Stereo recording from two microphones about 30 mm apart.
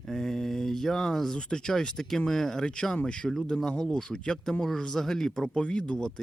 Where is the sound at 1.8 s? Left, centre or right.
Centre.